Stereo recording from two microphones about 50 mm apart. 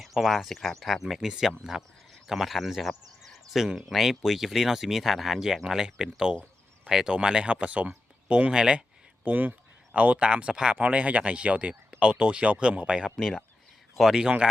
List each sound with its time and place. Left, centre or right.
0.0 s speech: centre
9.2 s a sound: right
10.0 s speech: right
13.1 s a man's voice: centre
14.2 s speech: right